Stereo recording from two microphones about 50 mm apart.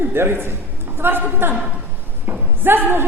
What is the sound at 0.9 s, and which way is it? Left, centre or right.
A man's voice, right.